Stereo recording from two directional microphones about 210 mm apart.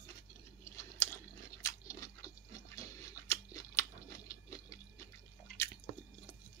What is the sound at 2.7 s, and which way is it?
Crunch, 15° left (ahead or behind).